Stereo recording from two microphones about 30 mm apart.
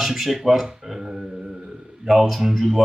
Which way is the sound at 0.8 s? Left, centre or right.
Centre.